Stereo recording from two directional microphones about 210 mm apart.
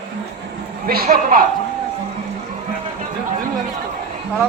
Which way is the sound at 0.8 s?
45° right (ahead or behind).